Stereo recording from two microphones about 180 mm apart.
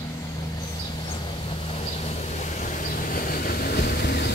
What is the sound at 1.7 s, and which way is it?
Vehicle, 40° left (ahead or behind).